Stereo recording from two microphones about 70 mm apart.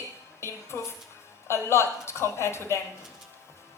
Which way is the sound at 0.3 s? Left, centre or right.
Left.